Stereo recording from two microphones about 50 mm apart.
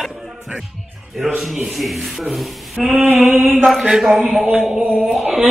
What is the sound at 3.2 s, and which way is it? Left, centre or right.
Mantra, right.